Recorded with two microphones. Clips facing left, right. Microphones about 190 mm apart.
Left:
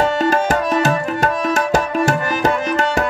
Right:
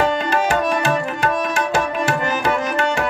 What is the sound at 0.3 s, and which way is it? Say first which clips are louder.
Music: left 2 dB; 40° left (ahead or behind).